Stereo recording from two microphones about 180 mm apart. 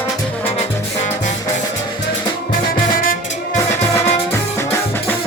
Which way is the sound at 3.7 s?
15° left (ahead or behind).